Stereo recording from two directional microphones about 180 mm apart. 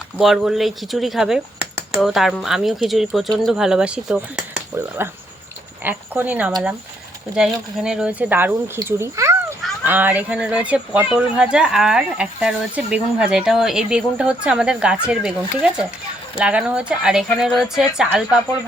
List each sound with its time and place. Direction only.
0.2 s speech: centre (ahead or behind)